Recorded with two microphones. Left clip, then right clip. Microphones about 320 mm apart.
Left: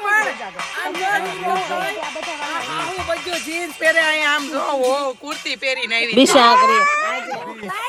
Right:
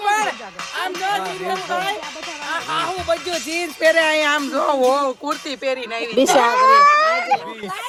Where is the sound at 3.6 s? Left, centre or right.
Right.